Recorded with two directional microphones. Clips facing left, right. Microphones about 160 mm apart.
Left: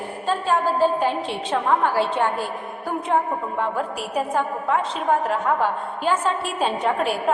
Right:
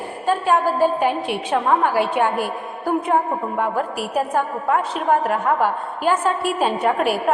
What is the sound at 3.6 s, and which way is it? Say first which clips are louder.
A woman's voice: right 3 dB; 5° right (ahead or behind).